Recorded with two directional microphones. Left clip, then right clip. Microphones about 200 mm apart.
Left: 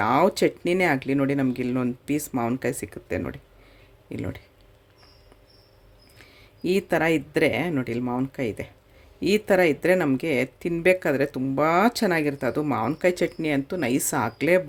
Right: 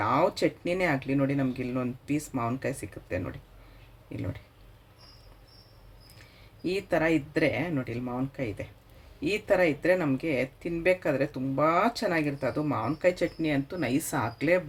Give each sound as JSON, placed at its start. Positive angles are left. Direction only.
{"t": 0.0, "sound": "speech", "side_deg": 60}
{"t": 6.1, "sound": "speech", "side_deg": 60}